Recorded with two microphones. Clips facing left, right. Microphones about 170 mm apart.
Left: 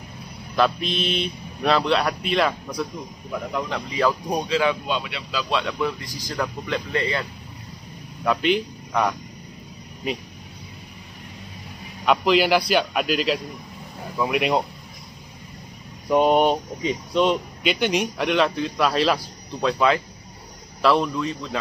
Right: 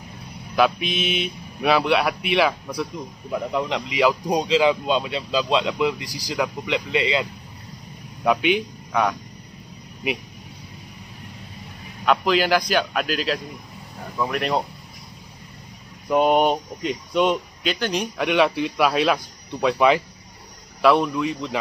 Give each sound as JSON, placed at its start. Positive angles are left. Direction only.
{"t": 0.6, "sound": "speech", "side_deg": -5}
{"t": 3.3, "sound": "a man's voice", "side_deg": -15}
{"t": 12.1, "sound": "a man's voice", "side_deg": 5}
{"t": 16.1, "sound": "speech", "side_deg": 0}
{"t": 20.8, "sound": "a man's voice", "side_deg": -5}